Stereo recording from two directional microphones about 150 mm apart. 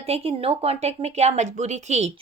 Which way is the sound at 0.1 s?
40° right (ahead or behind).